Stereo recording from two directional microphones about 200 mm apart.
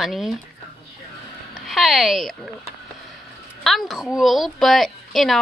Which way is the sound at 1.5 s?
Centre (ahead or behind).